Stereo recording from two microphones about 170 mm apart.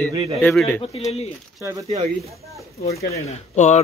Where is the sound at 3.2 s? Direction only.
40° left (ahead or behind).